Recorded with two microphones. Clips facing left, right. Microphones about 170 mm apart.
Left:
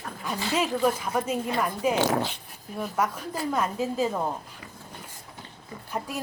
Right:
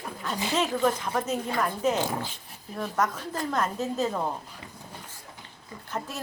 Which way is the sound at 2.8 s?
10° left (ahead or behind).